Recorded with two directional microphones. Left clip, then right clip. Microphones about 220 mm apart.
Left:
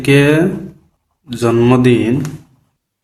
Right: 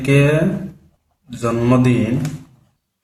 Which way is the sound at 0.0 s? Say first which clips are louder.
Left 5 dB; 40° left (ahead or behind).